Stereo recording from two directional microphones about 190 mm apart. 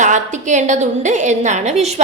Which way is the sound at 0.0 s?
40° right (ahead or behind).